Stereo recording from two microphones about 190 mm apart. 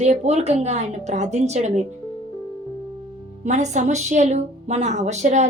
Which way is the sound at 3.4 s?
40° right (ahead or behind).